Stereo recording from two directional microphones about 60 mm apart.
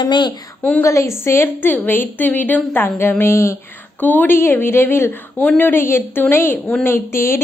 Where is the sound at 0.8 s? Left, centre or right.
Left.